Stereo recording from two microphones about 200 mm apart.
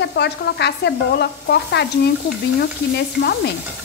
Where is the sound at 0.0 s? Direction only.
55° left (ahead or behind).